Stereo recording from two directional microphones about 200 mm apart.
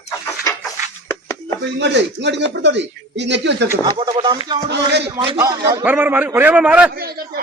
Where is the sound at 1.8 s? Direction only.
60° right (ahead or behind).